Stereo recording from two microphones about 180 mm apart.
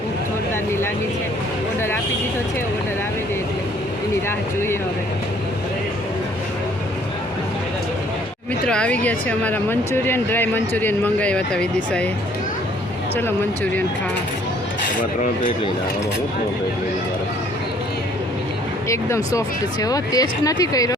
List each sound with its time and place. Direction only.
4.3 s speech: 15° left (ahead or behind)
8.6 s speech: 5° left (ahead or behind)
18.9 s speech: 15° left (ahead or behind)